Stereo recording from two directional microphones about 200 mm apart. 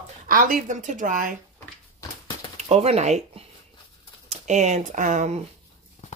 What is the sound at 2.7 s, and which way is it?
A woman's voice, 30° right (ahead or behind).